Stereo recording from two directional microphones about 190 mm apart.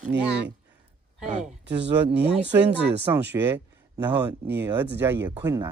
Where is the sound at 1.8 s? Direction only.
65° right (ahead or behind).